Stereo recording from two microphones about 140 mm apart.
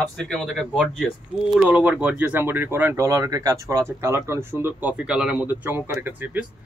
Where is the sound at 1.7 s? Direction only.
10° right (ahead or behind).